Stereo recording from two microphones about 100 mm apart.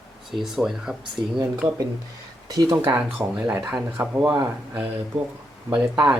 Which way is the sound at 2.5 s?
40° right (ahead or behind).